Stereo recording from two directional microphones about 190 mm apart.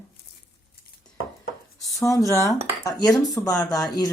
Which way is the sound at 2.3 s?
15° left (ahead or behind).